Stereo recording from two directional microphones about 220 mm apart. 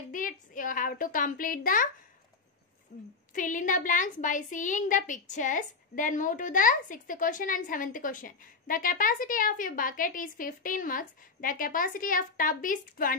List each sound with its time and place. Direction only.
0.1 s a child's voice: 40° left (ahead or behind)
2.9 s a woman's voice: 35° left (ahead or behind)